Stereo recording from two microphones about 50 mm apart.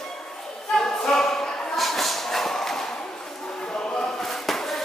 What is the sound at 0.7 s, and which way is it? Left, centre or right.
Choir, centre.